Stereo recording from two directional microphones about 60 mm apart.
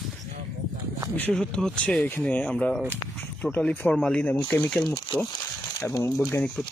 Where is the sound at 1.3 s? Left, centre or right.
Centre.